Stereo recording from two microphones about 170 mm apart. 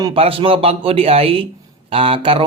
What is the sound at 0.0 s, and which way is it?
Speech, 30° right (ahead or behind).